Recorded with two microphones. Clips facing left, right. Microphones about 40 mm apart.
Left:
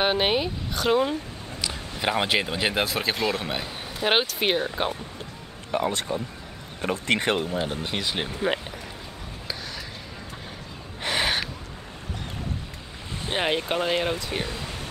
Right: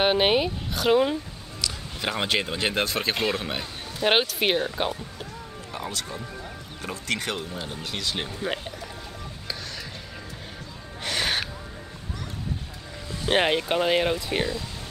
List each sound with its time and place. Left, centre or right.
0.0 s speech: centre
1.6 s a man's voice: centre
5.7 s speech: left
11.0 s gasp: centre
13.5 s speech: centre